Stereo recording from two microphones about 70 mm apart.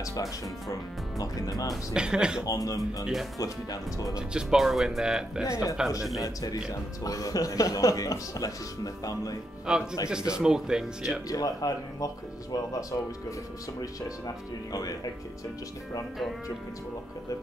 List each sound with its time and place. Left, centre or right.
0.0 s a man's voice: left
2.0 s speech: centre
2.4 s a man's voice: left
4.3 s speech: centre
5.5 s a man's voice: left
5.8 s speech: centre
6.2 s a man's voice: left
9.7 s speech: centre
11.2 s a man's voice: left